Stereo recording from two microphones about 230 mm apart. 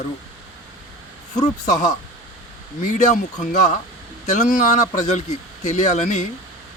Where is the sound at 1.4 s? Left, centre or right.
Left.